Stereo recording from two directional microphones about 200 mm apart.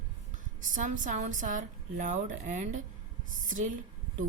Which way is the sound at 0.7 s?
40° right (ahead or behind).